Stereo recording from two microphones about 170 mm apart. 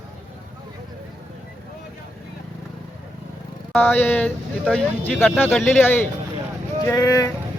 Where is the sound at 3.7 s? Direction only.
10° left (ahead or behind).